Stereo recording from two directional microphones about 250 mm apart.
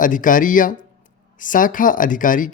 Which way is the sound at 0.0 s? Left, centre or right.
Left.